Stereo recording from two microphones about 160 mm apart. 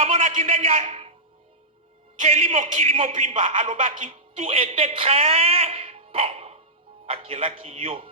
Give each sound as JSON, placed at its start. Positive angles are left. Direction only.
{"t": 0.0, "sound": "a man's voice", "side_deg": -50}
{"t": 2.1, "sound": "a man's voice", "side_deg": -50}
{"t": 3.5, "sound": "speech", "side_deg": -55}
{"t": 4.4, "sound": "a man's voice", "side_deg": -35}